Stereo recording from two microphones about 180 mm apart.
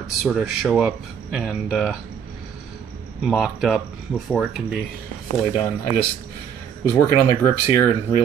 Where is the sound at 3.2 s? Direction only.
Centre (ahead or behind).